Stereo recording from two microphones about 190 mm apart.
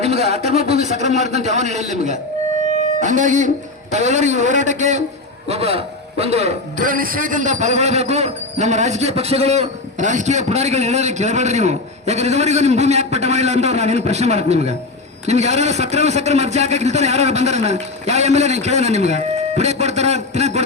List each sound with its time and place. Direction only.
0.0 s a man's voice: 35° right (ahead or behind)